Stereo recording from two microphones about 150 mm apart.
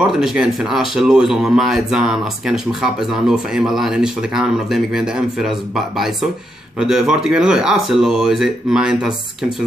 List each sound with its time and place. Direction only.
0.0 s speech: 5° right (ahead or behind)